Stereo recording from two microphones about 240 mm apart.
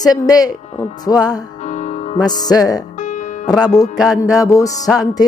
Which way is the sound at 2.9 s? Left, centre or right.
Left.